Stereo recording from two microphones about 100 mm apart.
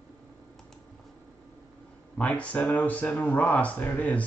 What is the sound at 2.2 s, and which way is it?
Speech, 15° left (ahead or behind).